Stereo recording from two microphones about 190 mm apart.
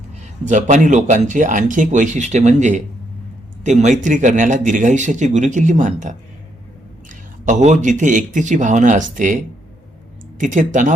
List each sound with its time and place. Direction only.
0.2 s speech: 40° right (ahead or behind)
10.4 s speech: 40° right (ahead or behind)